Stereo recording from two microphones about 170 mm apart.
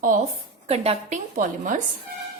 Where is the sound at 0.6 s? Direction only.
35° right (ahead or behind).